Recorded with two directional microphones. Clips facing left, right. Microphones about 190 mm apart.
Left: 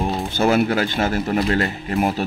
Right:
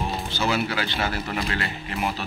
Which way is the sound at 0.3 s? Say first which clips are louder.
Left 9 dB; 50° left (ahead or behind).